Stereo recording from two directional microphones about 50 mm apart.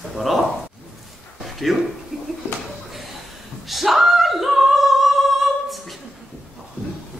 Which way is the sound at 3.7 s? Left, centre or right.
Centre.